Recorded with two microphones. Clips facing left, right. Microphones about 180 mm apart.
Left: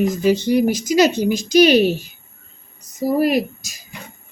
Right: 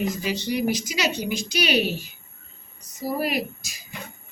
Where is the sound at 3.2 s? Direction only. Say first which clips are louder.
Left 9 dB; 45° left (ahead or behind).